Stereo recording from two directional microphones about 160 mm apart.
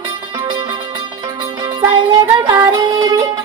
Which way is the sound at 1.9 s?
30° right (ahead or behind).